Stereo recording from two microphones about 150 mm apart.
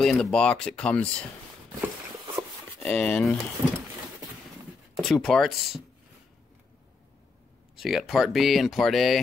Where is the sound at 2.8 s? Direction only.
10° left (ahead or behind).